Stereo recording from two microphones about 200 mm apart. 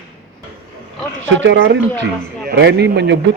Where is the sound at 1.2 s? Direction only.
65° right (ahead or behind).